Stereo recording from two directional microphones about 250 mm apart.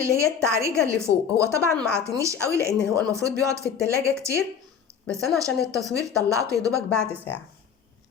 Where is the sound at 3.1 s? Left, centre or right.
Centre.